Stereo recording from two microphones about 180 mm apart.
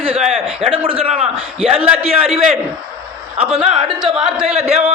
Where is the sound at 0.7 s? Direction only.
30° right (ahead or behind).